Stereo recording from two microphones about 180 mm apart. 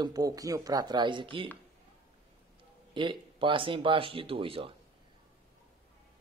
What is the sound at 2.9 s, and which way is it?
Speech, 25° right (ahead or behind).